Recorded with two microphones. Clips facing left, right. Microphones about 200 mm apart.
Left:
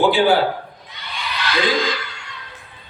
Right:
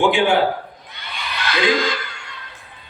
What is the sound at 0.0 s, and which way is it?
Speech, 35° left (ahead or behind).